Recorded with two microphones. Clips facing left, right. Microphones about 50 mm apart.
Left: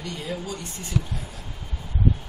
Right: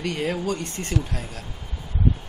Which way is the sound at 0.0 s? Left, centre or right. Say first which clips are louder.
Right 6 dB; right.